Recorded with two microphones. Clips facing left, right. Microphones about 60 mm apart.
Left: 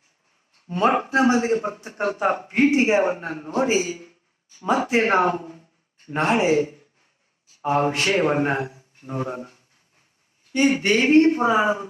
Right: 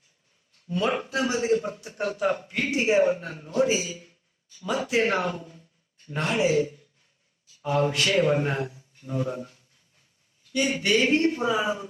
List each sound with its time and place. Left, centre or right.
0.5 s a man's voice: left